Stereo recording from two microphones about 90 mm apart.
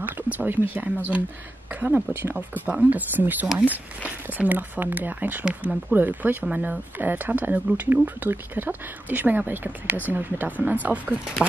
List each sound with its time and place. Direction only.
0.0 s a woman's voice: 20° right (ahead or behind)